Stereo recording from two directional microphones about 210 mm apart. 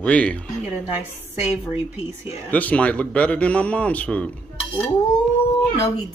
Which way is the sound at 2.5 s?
5° left (ahead or behind).